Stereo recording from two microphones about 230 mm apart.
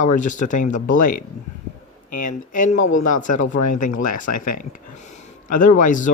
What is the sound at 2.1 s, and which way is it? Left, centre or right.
Speech, left.